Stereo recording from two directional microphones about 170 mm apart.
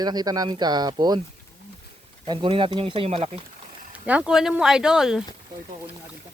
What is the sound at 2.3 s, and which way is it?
Speech, 30° right (ahead or behind).